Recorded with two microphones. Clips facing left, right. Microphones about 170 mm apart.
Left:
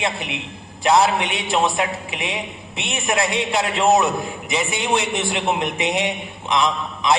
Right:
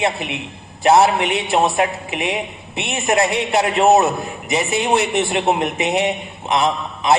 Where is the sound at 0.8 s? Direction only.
25° right (ahead or behind).